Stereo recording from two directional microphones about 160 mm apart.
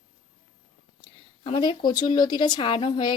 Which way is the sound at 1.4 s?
30° left (ahead or behind).